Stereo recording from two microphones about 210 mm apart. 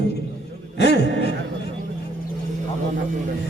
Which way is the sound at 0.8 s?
50° left (ahead or behind).